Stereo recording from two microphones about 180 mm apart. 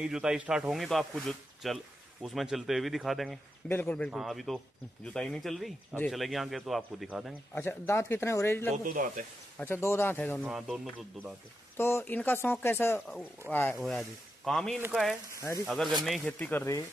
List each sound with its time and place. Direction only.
0.0 s speech: 5° right (ahead or behind)
7.5 s speech: 15° left (ahead or behind)
8.8 s speech: 50° right (ahead or behind)
9.6 s speech: 10° left (ahead or behind)
10.4 s speech: 5° right (ahead or behind)
11.7 s speech: 15° left (ahead or behind); by 15.9 s 5° right (ahead or behind)
16.3 s speech: 10° left (ahead or behind)